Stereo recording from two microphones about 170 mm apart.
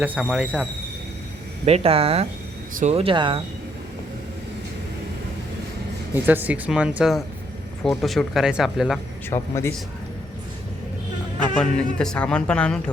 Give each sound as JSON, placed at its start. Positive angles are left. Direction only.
{"t": 0.0, "sound": "speech", "side_deg": -5}
{"t": 1.6, "sound": "speech", "side_deg": -35}
{"t": 6.2, "sound": "speech", "side_deg": -10}
{"t": 9.3, "sound": "speech", "side_deg": 15}
{"t": 11.5, "sound": "speech", "side_deg": 5}